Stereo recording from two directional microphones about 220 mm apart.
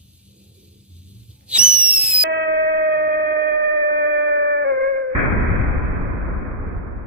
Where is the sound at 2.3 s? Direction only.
50° right (ahead or behind).